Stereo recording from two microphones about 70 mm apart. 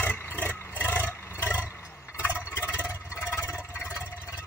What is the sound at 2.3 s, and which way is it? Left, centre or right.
Vehicle, left.